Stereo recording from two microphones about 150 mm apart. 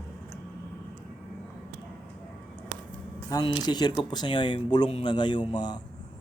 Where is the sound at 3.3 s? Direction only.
30° left (ahead or behind).